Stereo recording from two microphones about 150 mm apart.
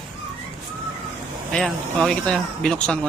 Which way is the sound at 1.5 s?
5° left (ahead or behind).